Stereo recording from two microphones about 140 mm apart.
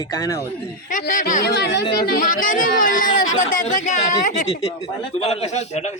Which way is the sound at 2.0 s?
80° left.